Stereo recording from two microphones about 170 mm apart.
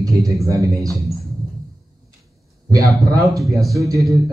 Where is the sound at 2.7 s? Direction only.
20° right (ahead or behind).